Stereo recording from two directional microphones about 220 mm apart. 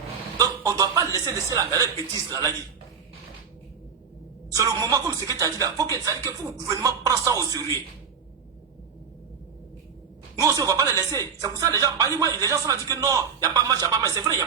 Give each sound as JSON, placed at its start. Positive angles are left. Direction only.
{"t": 0.3, "sound": "chuckle", "side_deg": -15}
{"t": 4.5, "sound": "speech", "side_deg": -15}
{"t": 10.4, "sound": "speech", "side_deg": -15}